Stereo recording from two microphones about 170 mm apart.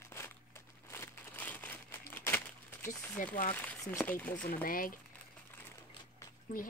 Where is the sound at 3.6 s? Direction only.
15° left (ahead or behind).